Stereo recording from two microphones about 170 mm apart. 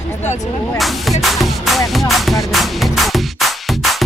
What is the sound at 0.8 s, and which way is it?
Music, centre (ahead or behind).